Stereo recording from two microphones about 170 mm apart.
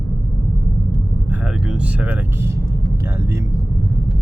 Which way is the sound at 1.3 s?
5° right (ahead or behind).